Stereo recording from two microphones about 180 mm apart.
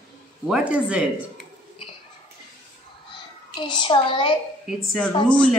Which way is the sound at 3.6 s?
25° left (ahead or behind).